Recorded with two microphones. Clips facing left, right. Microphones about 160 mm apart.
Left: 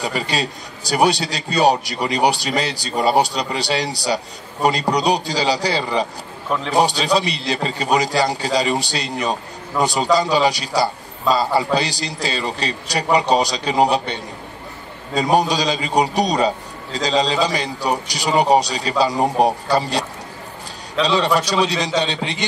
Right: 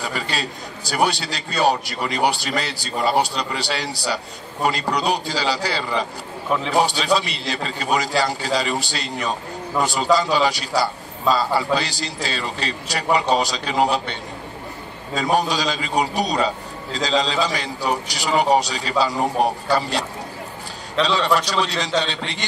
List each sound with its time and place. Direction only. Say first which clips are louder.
0.0 s a man's voice: left 4 dB; 15° left (ahead or behind)
15.1 s a man's voice: left 3 dB; 15° left (ahead or behind)